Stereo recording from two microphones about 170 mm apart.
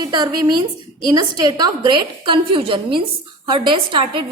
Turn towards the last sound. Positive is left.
turn(degrees=-30)  # may be behind; listen again after turning